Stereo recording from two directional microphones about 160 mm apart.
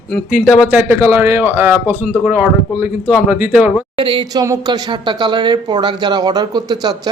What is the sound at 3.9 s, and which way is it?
Speech, 30° right (ahead or behind).